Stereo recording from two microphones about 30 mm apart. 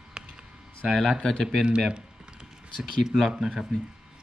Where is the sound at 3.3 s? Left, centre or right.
Centre.